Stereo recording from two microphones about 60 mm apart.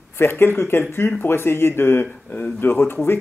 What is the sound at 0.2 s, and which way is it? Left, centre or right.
Speech, left.